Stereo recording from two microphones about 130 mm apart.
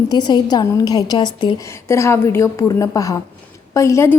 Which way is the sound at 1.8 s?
20° left (ahead or behind).